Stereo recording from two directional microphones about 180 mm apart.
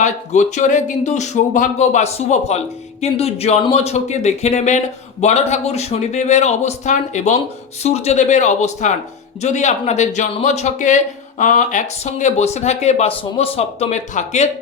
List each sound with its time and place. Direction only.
0.0 s a man's voice: 40° left (ahead or behind)